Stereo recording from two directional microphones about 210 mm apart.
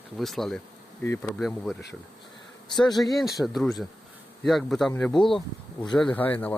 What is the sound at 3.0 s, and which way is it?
Speech, centre (ahead or behind).